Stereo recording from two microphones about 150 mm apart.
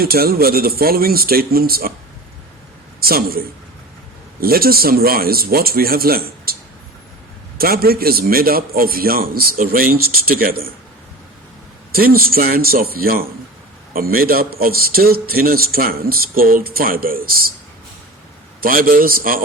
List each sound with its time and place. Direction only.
0.0 s a man's voice: 90° right
3.0 s a man's voice: 90° right
7.6 s a man's voice: 85° right
11.9 s a man's voice: 80° right
18.6 s a man's voice: 70° right (ahead or behind)